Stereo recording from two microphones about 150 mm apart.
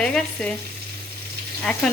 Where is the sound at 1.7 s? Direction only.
5° left (ahead or behind).